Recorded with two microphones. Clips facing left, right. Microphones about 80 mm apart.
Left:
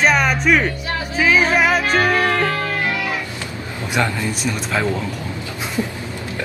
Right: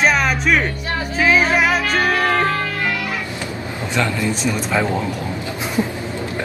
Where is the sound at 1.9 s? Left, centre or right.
Left.